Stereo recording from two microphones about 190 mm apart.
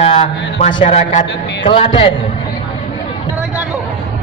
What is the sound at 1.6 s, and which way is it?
Speech, 25° left (ahead or behind).